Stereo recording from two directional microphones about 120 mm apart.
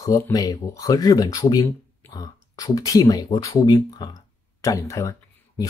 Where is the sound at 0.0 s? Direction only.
30° left (ahead or behind).